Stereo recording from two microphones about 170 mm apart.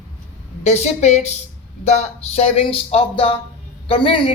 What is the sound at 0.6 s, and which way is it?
A woman's voice, 40° left (ahead or behind).